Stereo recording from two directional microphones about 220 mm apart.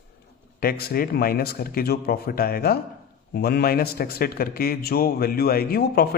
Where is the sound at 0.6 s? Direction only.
45° left (ahead or behind).